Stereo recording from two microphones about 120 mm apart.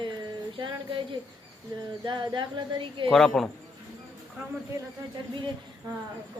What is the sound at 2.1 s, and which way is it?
Speech, 40° right (ahead or behind).